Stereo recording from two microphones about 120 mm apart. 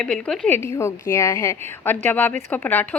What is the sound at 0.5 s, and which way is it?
A woman's voice, 20° left (ahead or behind).